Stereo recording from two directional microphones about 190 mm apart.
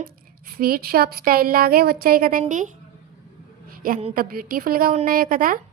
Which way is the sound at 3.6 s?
50° right (ahead or behind).